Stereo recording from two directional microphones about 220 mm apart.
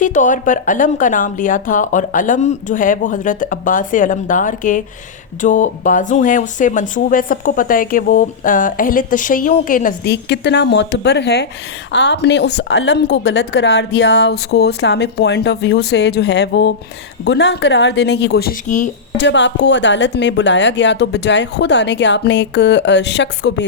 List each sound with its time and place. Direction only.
0.0 s speech: 35° left (ahead or behind)
10.1 s a woman's voice: 50° left (ahead or behind)
19.1 s a woman's voice: 55° left (ahead or behind)